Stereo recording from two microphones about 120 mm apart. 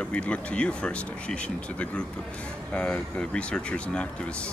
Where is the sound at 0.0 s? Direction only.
10° left (ahead or behind).